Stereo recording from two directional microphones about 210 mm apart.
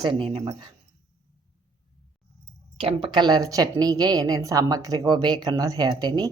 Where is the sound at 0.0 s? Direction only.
20° right (ahead or behind).